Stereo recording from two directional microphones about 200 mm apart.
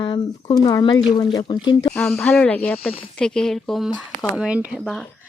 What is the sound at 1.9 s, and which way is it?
Speech, 5° left (ahead or behind).